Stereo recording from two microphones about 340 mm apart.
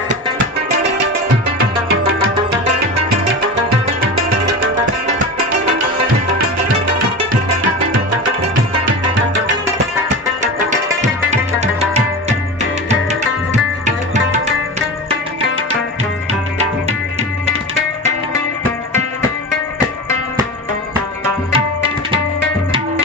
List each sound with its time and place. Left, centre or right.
10.7 s tabla: right
21.5 s tabla: centre